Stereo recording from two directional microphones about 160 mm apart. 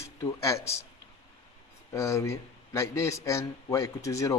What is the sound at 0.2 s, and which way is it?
Speech, 20° left (ahead or behind).